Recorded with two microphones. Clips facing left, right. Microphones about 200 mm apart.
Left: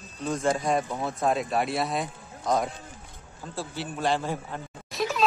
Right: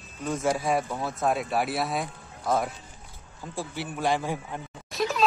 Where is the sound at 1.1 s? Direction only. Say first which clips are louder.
Left 1 dB; centre (ahead or behind).